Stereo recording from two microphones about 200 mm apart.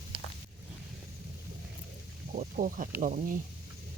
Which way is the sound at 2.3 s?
40° right (ahead or behind).